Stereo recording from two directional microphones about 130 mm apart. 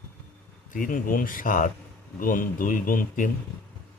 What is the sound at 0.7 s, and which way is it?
A man's voice, 90° left.